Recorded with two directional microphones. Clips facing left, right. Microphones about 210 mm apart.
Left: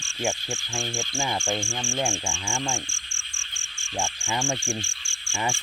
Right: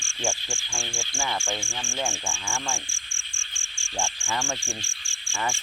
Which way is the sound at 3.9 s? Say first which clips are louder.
Left 1 dB; centre (ahead or behind).